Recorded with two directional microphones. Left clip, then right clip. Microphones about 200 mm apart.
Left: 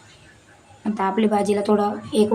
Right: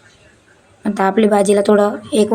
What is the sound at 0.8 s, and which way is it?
A woman's voice, 25° right (ahead or behind).